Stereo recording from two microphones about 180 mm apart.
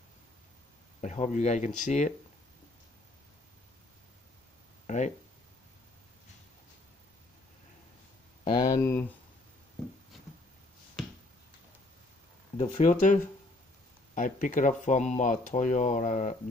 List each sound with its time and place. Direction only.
1.0 s speech: 40° left (ahead or behind)
4.8 s a sound: 40° left (ahead or behind)
8.5 s speech: 20° left (ahead or behind)
12.5 s speech: 45° left (ahead or behind)